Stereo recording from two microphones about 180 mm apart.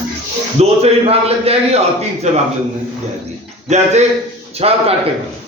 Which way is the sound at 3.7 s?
40° right (ahead or behind).